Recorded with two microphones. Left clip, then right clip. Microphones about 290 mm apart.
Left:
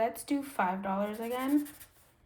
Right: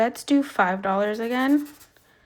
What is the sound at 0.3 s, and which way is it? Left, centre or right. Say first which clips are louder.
Speech: right 10 dB; right.